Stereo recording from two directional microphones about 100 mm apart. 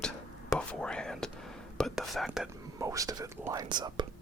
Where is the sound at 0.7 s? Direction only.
10° left (ahead or behind).